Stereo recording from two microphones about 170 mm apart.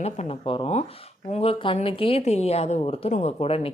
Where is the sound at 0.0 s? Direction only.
35° left (ahead or behind).